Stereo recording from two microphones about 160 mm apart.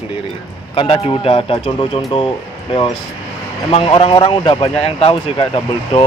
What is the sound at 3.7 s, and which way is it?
Speech, 35° left (ahead or behind).